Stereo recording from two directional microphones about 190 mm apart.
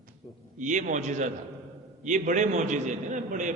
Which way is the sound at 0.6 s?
40° right (ahead or behind).